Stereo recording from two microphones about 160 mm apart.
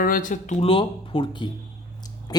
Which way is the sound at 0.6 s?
35° left (ahead or behind).